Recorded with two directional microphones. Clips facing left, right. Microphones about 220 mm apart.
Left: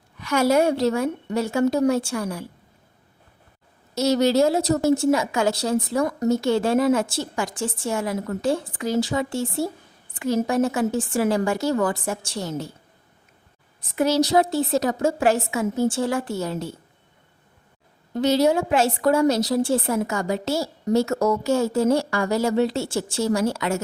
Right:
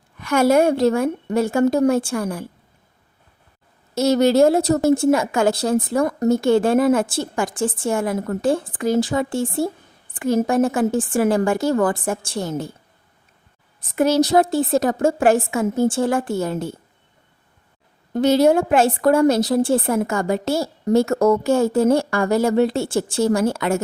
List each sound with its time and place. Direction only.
0.2 s a woman's voice: 50° right (ahead or behind)
3.9 s a woman's voice: 55° right (ahead or behind)
13.9 s a woman's voice: 50° right (ahead or behind)
18.1 s a woman's voice: 50° right (ahead or behind)